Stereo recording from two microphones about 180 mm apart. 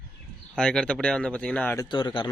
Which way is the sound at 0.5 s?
5° left (ahead or behind).